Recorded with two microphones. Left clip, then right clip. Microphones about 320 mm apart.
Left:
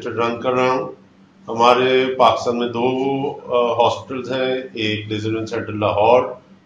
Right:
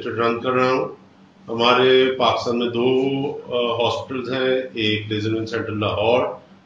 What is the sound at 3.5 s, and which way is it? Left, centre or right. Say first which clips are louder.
Speech: left 5 dB; centre.